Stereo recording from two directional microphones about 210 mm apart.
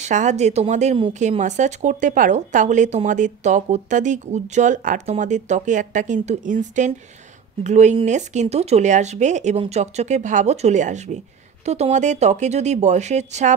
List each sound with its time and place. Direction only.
0.0 s speech: 35° right (ahead or behind)